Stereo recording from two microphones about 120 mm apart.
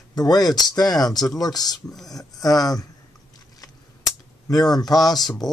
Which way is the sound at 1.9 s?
Centre (ahead or behind).